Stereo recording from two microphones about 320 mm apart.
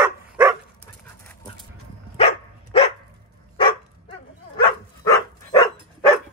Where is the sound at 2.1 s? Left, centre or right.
Centre.